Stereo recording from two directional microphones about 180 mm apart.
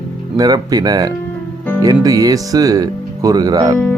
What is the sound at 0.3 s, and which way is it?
Speech, 20° right (ahead or behind).